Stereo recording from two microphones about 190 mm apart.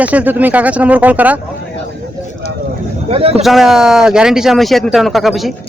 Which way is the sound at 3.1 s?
30° right (ahead or behind).